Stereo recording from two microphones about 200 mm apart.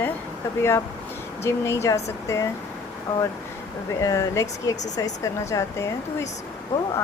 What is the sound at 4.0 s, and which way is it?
Speech, 15° left (ahead or behind).